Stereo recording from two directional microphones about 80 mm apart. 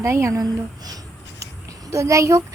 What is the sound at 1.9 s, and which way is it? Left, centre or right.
Speech, right.